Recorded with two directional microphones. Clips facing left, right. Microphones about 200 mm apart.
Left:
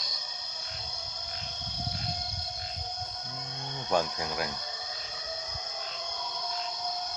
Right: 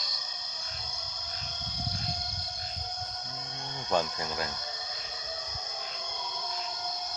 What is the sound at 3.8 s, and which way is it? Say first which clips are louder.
Speech: left 1 dB; 10° left (ahead or behind).